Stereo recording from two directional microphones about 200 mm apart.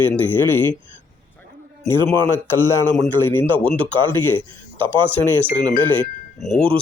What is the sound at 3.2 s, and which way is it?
Speech, 10° left (ahead or behind).